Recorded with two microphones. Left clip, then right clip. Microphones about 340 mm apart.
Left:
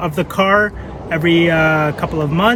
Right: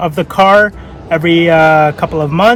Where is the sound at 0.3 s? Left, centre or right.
Centre.